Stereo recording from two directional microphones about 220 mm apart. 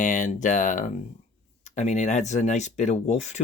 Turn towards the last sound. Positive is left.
turn(degrees=30)  # may be behind; listen again after turning